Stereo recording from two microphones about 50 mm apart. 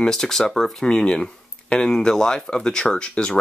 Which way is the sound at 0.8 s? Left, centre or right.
Centre.